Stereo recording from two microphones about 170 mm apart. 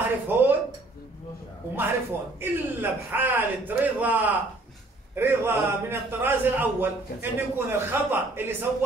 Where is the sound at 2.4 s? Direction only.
10° right (ahead or behind).